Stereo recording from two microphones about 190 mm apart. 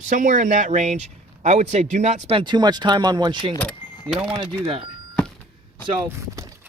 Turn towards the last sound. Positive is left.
turn(degrees=-15)  # may be behind; listen again after turning